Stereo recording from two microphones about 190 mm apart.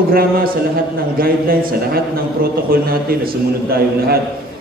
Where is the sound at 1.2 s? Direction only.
50° right (ahead or behind).